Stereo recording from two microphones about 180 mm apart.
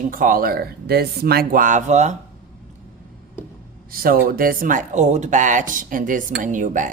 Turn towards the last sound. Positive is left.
turn(degrees=-45)  # may be behind; listen again after turning